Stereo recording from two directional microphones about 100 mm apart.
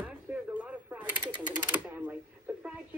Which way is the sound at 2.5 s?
20° right (ahead or behind).